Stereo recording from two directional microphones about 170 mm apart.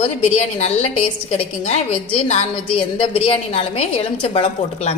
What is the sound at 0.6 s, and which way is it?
A woman's voice, 40° left (ahead or behind).